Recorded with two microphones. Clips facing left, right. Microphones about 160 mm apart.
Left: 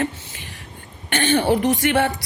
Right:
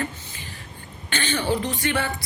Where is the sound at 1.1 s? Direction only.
60° left (ahead or behind).